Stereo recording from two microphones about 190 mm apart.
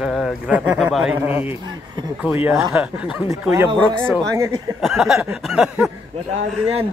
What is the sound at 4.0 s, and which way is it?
Speech, 15° right (ahead or behind).